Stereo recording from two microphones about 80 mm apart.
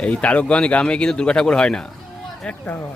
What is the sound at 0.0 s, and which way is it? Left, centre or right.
A man's voice, centre.